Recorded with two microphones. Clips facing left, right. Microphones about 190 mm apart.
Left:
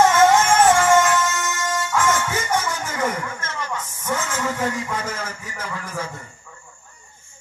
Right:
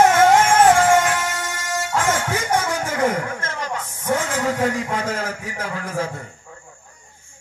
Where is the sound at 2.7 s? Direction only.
60° right (ahead or behind).